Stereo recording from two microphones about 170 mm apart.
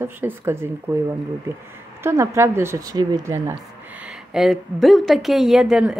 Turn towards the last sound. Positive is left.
turn(degrees=-5)  # may be behind; listen again after turning